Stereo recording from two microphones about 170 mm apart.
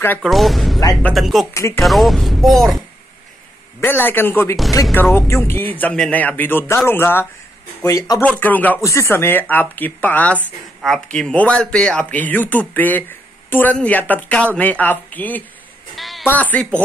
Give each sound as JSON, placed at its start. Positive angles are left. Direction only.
{"t": 0.0, "sound": "speech", "side_deg": 10}
{"t": 0.3, "sound": "speech", "side_deg": 0}
{"t": 1.5, "sound": "speech", "side_deg": 20}
{"t": 1.8, "sound": "speech", "side_deg": 0}
{"t": 3.8, "sound": "speech", "side_deg": 10}
{"t": 8.2, "sound": "speech", "side_deg": 10}
{"t": 16.0, "sound": "music", "side_deg": 0}
{"t": 16.3, "sound": "speech", "side_deg": 10}